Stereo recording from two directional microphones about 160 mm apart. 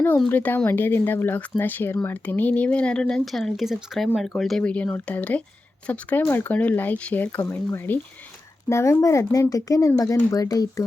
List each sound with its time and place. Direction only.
0.3 s speech: 10° left (ahead or behind)